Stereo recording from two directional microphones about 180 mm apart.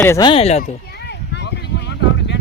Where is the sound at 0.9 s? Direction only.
70° left (ahead or behind).